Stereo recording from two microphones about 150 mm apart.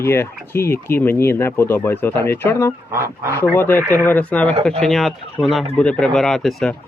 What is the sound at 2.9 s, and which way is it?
Speech, 20° right (ahead or behind).